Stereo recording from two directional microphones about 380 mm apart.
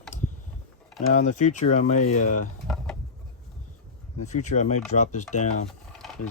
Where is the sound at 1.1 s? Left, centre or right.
Centre.